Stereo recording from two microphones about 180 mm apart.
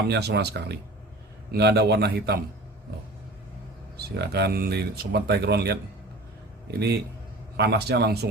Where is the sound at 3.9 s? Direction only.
65° right (ahead or behind).